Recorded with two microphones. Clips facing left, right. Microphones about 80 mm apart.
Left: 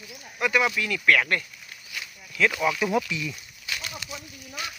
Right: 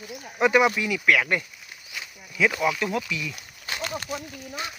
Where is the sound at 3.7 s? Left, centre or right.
Right.